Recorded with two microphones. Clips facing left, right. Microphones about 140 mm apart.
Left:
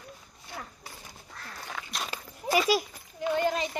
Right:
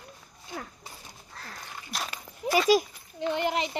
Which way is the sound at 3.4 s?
20° right (ahead or behind).